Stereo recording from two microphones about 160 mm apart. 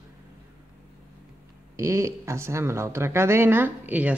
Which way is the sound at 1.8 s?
20° right (ahead or behind).